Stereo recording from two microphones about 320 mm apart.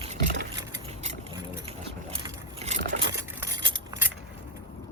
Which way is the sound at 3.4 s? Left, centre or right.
Centre.